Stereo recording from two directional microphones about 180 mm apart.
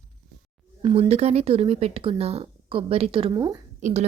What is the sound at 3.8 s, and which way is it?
Speech, 40° right (ahead or behind).